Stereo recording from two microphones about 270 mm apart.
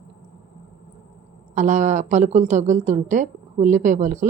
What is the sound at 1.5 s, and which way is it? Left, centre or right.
A woman's voice, right.